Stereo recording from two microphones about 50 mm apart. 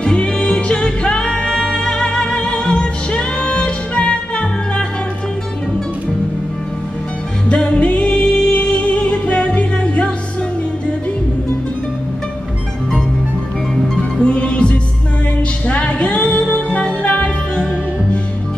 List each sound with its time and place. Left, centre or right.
0.0 s music: centre
7.4 s music: left
14.2 s music: left